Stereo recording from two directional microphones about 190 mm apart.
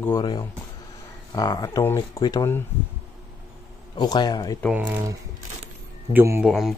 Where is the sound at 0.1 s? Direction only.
25° left (ahead or behind).